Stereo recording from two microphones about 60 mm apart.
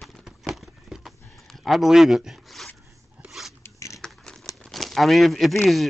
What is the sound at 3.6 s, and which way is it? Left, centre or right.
Zipper, left.